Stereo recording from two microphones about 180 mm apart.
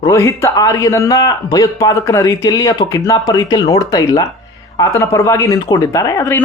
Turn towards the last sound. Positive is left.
turn(degrees=15)  # may be behind; listen again after turning